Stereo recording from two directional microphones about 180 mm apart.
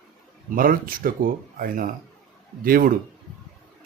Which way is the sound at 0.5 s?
50° right (ahead or behind).